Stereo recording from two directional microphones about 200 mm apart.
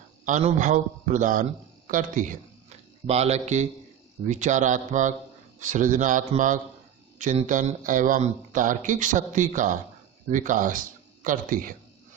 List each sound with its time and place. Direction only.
0.3 s speech: 40° right (ahead or behind)